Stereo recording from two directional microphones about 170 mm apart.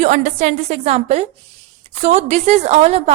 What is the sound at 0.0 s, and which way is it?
A woman's voice, 45° right (ahead or behind).